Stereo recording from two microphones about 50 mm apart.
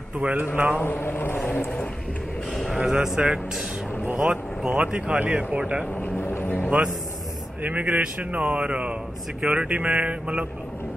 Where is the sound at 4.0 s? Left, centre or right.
Right.